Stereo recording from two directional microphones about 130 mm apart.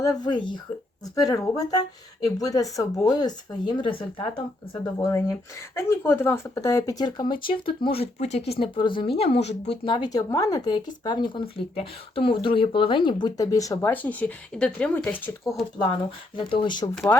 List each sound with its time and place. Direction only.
0.2 s speech: 35° left (ahead or behind)
5.0 s speech: 25° left (ahead or behind); by 9.9 s 55° left (ahead or behind)
9.9 s speech: 30° left (ahead or behind)
13.9 s speech: 10° left (ahead or behind)
15.8 s speech: 40° left (ahead or behind)